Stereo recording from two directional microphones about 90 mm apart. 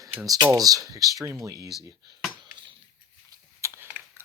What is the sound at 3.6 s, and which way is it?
Typing, 35° right (ahead or behind).